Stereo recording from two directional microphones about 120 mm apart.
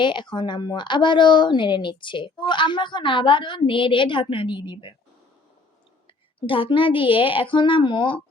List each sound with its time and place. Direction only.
0.0 s a woman's voice: 40° left (ahead or behind)
6.4 s a child's voice: 45° left (ahead or behind)